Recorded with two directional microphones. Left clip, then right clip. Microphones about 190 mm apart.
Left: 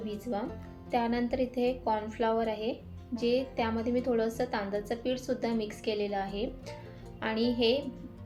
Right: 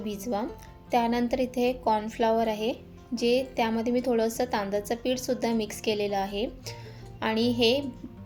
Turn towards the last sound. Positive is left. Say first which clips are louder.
# right 4 dB
turn(degrees=-45)  # may be behind; listen again after turning